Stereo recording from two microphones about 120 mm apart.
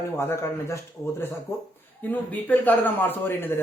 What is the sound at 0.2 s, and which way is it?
Speech, 20° left (ahead or behind).